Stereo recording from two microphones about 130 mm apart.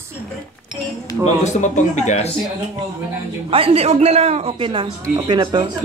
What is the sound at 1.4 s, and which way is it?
Speech, 65° left (ahead or behind).